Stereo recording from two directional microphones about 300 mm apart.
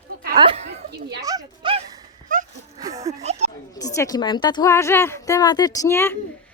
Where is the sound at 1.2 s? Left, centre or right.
Centre.